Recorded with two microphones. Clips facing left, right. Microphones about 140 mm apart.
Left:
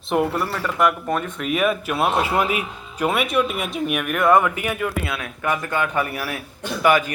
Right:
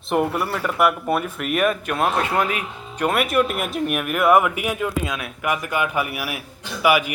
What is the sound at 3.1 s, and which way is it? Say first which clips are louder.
A man's voice: right 1 dB; centre (ahead or behind).